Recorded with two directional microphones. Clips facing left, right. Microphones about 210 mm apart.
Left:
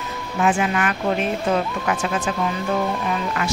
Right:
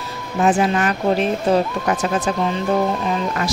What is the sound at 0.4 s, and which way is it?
Speech, 35° right (ahead or behind).